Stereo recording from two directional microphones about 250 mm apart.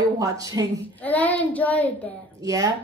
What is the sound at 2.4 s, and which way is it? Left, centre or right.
Speech, centre.